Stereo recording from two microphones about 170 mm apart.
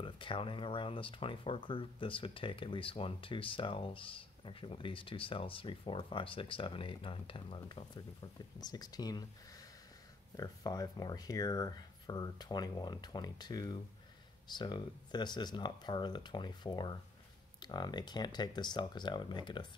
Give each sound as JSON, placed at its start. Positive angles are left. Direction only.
{"t": 0.0, "sound": "speech", "side_deg": 30}
{"t": 10.3, "sound": "speech", "side_deg": 20}